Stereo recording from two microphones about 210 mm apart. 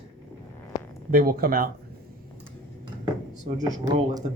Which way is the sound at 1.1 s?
45° right (ahead or behind).